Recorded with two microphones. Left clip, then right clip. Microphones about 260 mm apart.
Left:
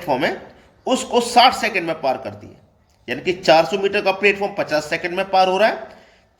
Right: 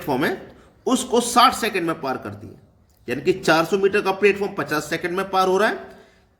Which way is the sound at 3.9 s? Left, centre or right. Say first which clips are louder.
Left 2 dB; right.